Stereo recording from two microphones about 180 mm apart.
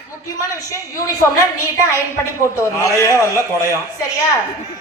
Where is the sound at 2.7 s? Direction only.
15° left (ahead or behind).